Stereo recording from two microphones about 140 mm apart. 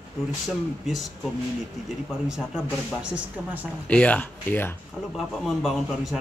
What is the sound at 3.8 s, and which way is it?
Speech, 10° left (ahead or behind).